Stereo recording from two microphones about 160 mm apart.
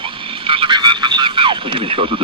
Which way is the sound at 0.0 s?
35° right (ahead or behind).